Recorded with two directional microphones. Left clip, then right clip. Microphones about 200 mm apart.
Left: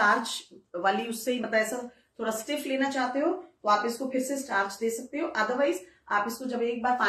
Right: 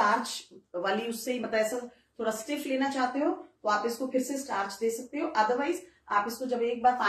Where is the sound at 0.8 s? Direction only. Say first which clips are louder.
Left 4 dB; 15° left (ahead or behind).